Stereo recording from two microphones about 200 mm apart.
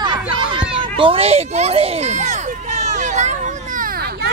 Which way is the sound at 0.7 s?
25° right (ahead or behind).